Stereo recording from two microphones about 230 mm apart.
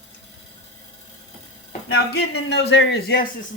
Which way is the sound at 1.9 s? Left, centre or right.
Left.